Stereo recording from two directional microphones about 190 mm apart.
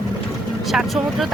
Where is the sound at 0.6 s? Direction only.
Centre (ahead or behind).